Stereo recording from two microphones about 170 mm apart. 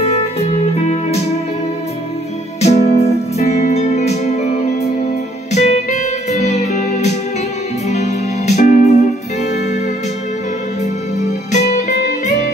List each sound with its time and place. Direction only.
0.0 s music: 35° left (ahead or behind)
2.6 s music: 40° left (ahead or behind)